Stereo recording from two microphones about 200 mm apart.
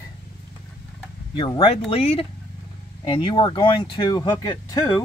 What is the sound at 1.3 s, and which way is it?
Speech, 25° left (ahead or behind).